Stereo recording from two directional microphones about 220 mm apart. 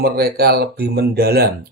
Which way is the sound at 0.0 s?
45° right (ahead or behind).